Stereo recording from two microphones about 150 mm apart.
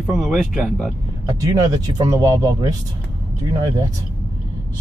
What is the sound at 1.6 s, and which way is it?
Speech, 25° right (ahead or behind).